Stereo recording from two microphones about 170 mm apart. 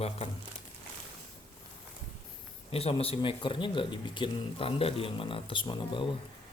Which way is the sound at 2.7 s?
35° left (ahead or behind).